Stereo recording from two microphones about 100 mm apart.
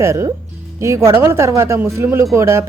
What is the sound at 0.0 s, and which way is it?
A man's voice, 25° right (ahead or behind).